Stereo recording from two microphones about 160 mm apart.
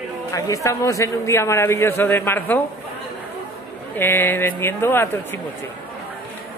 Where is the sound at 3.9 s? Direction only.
15° left (ahead or behind).